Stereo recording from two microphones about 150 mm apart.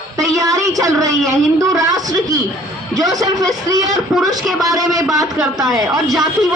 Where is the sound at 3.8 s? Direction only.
Centre (ahead or behind).